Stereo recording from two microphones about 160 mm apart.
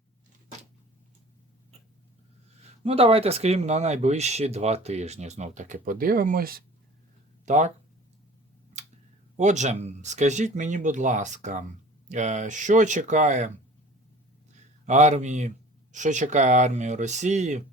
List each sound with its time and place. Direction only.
2.6 s speech: 35° right (ahead or behind); by 6.6 s 65° right (ahead or behind)
7.4 s speech: 45° right (ahead or behind)
9.4 s speech: 45° right (ahead or behind)
14.8 s speech: 45° right (ahead or behind)